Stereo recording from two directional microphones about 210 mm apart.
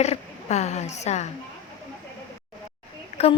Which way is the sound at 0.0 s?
30° left (ahead or behind).